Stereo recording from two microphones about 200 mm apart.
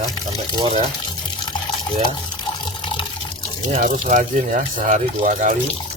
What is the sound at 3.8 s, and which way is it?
Speech, 40° right (ahead or behind).